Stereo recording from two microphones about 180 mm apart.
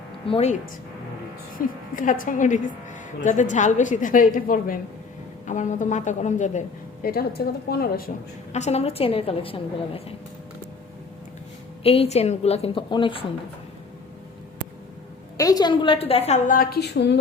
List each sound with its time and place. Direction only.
0.3 s a woman's voice: 35° left (ahead or behind)
1.5 s a woman's voice: 50° left (ahead or behind)
8.5 s a woman's voice: 35° left (ahead or behind)
11.8 s a woman's voice: 35° left (ahead or behind)
15.4 s a woman's voice: 20° left (ahead or behind); by 17.2 s 70° left (ahead or behind)